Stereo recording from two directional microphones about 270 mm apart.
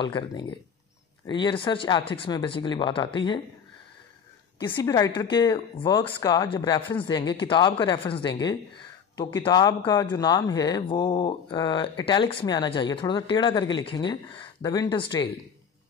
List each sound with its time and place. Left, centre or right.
0.0 s a woman's voice: centre
4.6 s a woman's voice: centre